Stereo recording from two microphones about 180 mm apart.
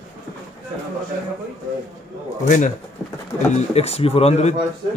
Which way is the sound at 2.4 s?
45° left (ahead or behind).